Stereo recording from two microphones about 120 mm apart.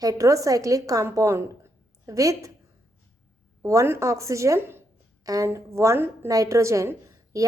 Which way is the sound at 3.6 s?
25° right (ahead or behind).